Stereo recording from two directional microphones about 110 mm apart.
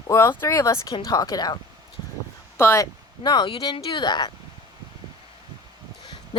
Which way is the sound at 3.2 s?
45° left (ahead or behind).